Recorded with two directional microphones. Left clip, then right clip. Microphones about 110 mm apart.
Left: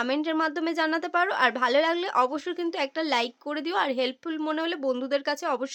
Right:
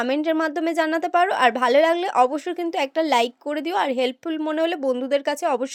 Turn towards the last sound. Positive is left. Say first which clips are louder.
# right 5 dB
turn(degrees=-40)  # may be behind; listen again after turning